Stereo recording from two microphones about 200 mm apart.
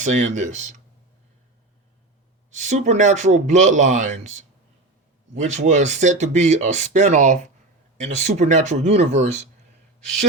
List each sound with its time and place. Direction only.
0.0 s speech: 35° right (ahead or behind)
2.5 s speech: 35° right (ahead or behind)